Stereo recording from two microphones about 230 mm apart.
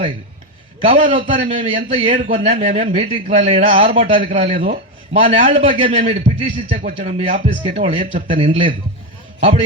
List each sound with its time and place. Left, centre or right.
0.8 s a man's voice: right